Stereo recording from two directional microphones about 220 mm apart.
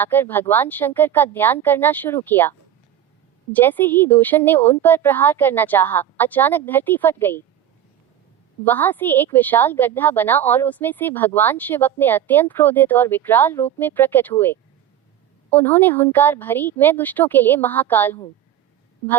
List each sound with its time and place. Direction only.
0.0 s a woman's voice: 10° left (ahead or behind)
8.6 s a woman's voice: 10° left (ahead or behind)